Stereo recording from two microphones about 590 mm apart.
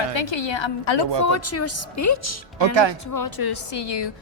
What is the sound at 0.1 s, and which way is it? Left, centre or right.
Speech, left.